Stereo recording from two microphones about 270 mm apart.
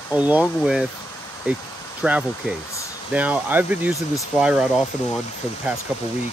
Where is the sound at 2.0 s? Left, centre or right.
Centre.